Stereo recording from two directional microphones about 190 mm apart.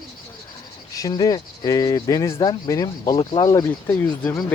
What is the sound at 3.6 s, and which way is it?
Speech, 10° left (ahead or behind).